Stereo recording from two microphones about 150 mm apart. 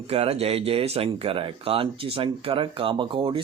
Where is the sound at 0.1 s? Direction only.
40° right (ahead or behind).